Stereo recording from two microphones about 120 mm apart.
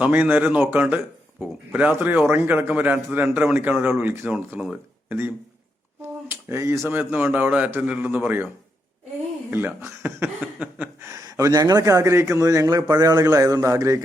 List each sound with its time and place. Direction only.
0.0 s a man's voice: 15° right (ahead or behind)
6.8 s speech: 15° right (ahead or behind)
9.5 s speech: 15° right (ahead or behind)
10.0 s a sound: 15° right (ahead or behind)
11.0 s a man's voice: 30° right (ahead or behind)